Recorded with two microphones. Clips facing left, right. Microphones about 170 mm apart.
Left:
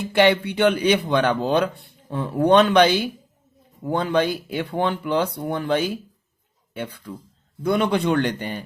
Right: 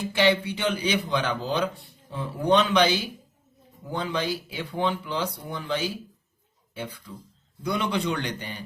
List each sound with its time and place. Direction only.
0.1 s a man's voice: 60° left (ahead or behind)